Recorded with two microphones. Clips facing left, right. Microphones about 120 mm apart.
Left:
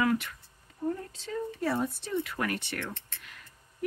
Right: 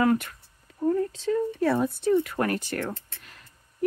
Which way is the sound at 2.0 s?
50° right (ahead or behind).